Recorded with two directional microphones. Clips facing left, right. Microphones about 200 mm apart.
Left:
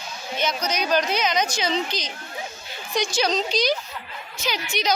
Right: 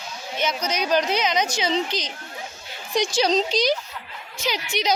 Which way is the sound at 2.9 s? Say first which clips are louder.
Right 3 dB; 30° right (ahead or behind).